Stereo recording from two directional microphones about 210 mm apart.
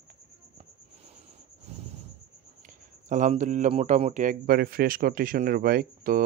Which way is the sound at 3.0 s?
35° right (ahead or behind).